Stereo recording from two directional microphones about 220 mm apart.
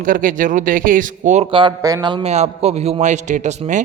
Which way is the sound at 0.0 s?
40° right (ahead or behind).